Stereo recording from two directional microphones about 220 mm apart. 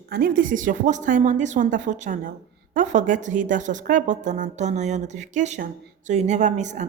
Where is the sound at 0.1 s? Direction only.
40° right (ahead or behind).